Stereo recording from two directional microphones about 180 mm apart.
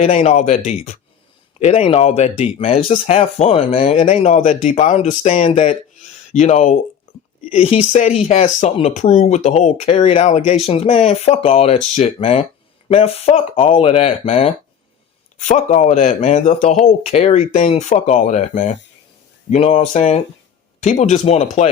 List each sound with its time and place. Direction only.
0.0 s speech: 35° left (ahead or behind)
7.1 s a sound: 35° left (ahead or behind)
7.5 s speech: 35° left (ahead or behind)